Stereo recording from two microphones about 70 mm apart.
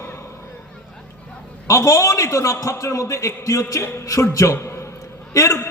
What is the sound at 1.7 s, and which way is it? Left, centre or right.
A man's voice, left.